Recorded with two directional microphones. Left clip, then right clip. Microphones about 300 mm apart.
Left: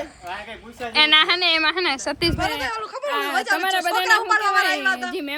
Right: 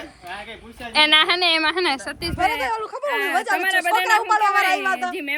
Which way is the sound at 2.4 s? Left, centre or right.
Right.